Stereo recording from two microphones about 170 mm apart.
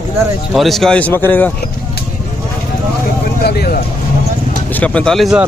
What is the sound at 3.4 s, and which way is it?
Speech, 65° left (ahead or behind).